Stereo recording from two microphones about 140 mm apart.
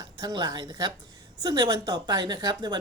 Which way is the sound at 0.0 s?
30° right (ahead or behind).